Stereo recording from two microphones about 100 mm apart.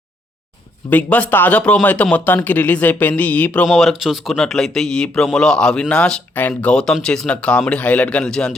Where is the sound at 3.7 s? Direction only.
Centre (ahead or behind).